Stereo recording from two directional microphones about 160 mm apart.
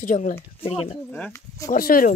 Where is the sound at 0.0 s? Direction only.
50° left (ahead or behind).